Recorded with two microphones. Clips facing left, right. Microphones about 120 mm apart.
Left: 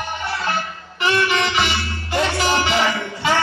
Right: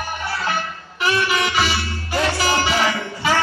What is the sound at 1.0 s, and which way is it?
Music, 5° right (ahead or behind).